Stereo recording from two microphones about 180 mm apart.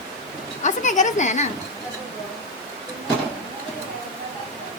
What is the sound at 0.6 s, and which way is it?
Speech, 40° left (ahead or behind).